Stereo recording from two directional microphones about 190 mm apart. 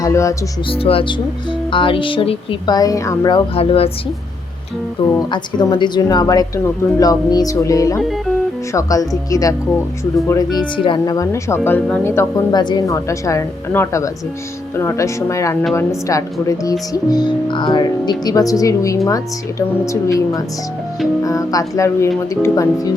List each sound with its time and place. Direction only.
0.0 s speech: 15° left (ahead or behind)
0.7 s speech: 30° left (ahead or behind)
5.3 s speech: 25° left (ahead or behind)